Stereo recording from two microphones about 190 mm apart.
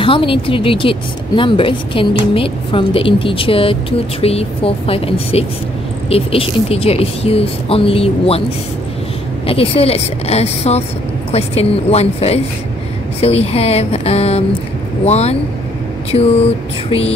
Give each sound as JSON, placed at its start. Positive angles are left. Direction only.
{"t": 0.0, "sound": "a woman's voice", "side_deg": 25}
{"t": 9.5, "sound": "a woman's voice", "side_deg": 30}